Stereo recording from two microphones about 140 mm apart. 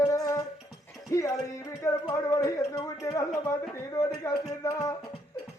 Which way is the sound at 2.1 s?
25° left (ahead or behind).